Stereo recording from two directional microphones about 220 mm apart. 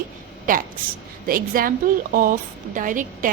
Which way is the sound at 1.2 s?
40° right (ahead or behind).